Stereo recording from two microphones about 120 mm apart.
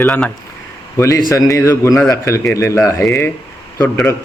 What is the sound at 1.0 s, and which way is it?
Speech, 30° left (ahead or behind).